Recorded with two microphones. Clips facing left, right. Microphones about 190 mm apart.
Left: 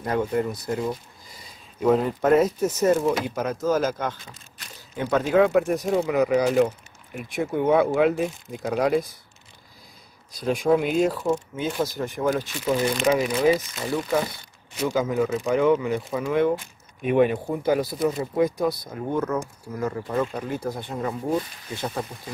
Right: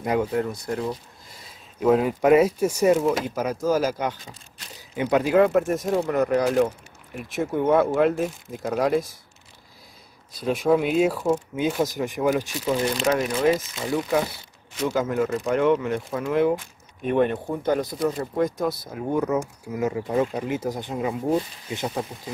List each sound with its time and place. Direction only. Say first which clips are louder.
0.0 s speech: right 1 dB; 10° right (ahead or behind)
10.3 s speech: even; centre (ahead or behind)
12.6 s speech: left 2 dB; centre (ahead or behind)
19.0 s speech: right 2 dB; 15° right (ahead or behind)